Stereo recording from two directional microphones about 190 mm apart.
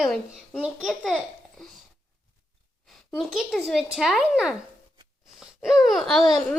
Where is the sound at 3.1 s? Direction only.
Centre (ahead or behind).